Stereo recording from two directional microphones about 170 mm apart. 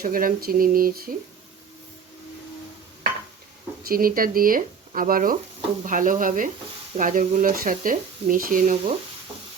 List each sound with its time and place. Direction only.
0.0 s speech: 55° right (ahead or behind)
3.8 s speech: 60° right (ahead or behind)